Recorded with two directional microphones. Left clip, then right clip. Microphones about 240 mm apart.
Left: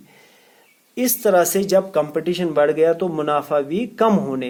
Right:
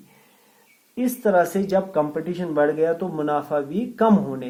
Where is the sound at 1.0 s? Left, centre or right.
Left.